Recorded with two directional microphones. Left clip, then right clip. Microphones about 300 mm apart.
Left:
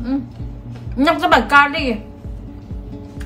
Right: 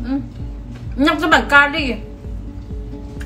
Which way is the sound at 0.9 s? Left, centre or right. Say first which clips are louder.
Left 1 dB; centre.